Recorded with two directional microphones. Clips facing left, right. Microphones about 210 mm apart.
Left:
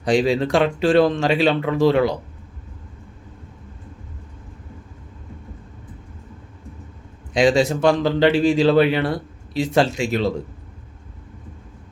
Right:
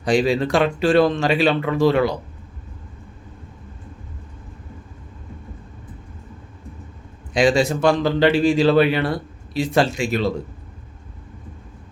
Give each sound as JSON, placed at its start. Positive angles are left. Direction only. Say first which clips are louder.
{"t": 0.0, "sound": "speech", "louder": "even", "side_deg": 25}
{"t": 7.3, "sound": "speech", "louder": "left 1 dB", "side_deg": 20}